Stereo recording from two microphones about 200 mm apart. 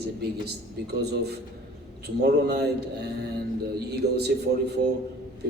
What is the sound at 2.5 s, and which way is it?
A man's voice, 55° right (ahead or behind).